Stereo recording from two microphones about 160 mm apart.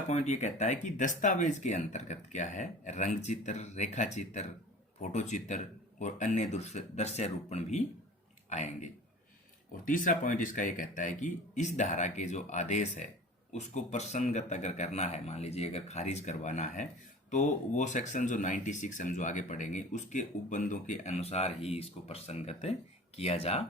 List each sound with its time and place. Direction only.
0.1 s speech: 45° left (ahead or behind)